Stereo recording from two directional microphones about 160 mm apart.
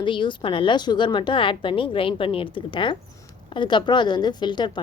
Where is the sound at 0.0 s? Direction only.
30° left (ahead or behind).